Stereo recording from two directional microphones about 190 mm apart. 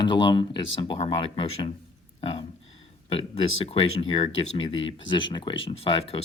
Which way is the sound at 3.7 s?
30° left (ahead or behind).